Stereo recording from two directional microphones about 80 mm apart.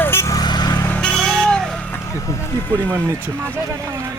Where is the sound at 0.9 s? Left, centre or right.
Centre.